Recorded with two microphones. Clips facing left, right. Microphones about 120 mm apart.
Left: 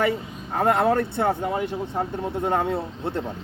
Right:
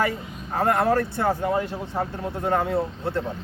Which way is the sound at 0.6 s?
25° left (ahead or behind).